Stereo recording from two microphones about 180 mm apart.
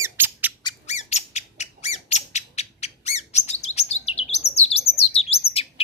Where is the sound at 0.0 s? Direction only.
10° right (ahead or behind).